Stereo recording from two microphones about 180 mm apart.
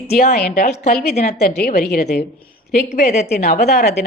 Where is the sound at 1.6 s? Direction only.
55° left (ahead or behind).